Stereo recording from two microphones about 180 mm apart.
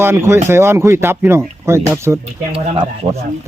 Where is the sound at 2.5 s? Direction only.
30° right (ahead or behind).